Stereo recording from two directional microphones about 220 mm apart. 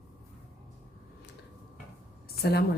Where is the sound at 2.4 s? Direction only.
45° left (ahead or behind).